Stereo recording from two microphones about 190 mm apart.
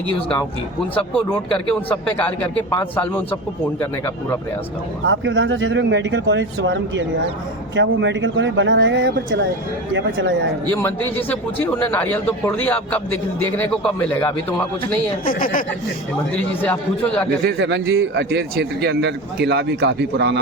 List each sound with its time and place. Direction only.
0.9 s a man's voice: 5° left (ahead or behind)
5.0 s speech: 75° right (ahead or behind)
11.2 s a man's voice: 10° left (ahead or behind)
15.2 s a woman's voice: 50° left (ahead or behind)
17.4 s a man's voice: 65° right (ahead or behind)